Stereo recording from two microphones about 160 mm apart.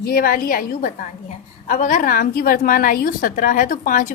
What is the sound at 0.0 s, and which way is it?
A woman's voice, 65° left (ahead or behind).